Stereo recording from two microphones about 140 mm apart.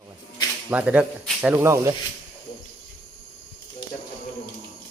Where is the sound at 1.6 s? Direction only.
20° right (ahead or behind).